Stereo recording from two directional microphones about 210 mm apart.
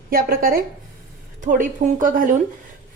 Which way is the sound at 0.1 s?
45° right (ahead or behind).